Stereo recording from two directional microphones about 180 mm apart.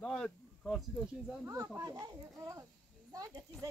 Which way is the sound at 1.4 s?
15° right (ahead or behind).